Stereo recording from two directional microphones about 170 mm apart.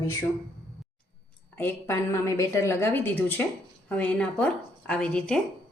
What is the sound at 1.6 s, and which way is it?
A woman's voice, 15° left (ahead or behind).